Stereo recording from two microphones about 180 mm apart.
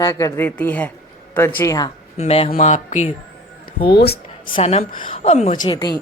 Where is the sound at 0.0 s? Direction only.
20° left (ahead or behind).